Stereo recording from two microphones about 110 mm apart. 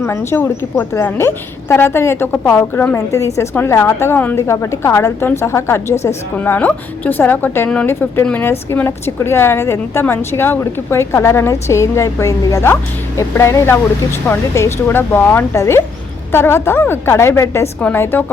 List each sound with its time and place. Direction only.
0.0 s a woman's voice: 25° left (ahead or behind)